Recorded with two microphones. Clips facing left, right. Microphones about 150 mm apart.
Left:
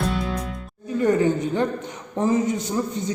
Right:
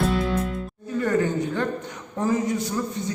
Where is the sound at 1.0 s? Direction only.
20° left (ahead or behind).